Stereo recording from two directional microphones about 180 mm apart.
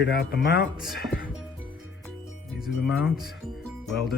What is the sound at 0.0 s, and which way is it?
Speech, 60° left (ahead or behind).